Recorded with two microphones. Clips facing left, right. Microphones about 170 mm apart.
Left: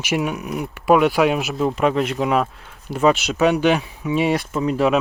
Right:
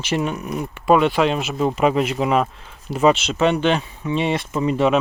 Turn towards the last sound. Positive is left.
turn(degrees=0)  # may be behind; listen again after turning